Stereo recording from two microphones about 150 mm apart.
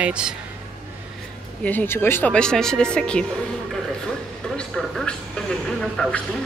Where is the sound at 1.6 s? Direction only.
15° left (ahead or behind).